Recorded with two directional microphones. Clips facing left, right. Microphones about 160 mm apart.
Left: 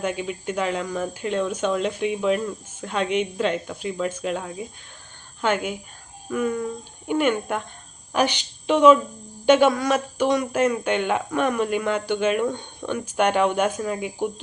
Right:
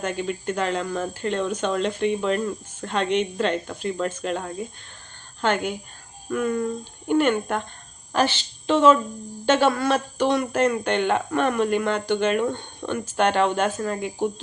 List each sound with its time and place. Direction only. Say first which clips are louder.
0.0 s a woman's voice: even; 10° left (ahead or behind)